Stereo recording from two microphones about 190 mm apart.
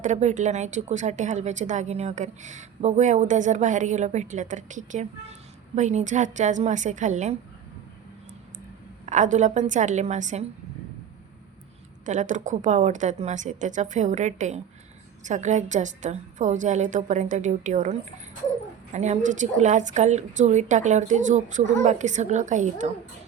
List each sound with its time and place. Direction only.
0.0 s a woman's voice: 40° right (ahead or behind)
9.0 s a woman's voice: 40° right (ahead or behind)
12.0 s a woman's voice: 40° right (ahead or behind)
18.9 s a woman's voice: 35° right (ahead or behind)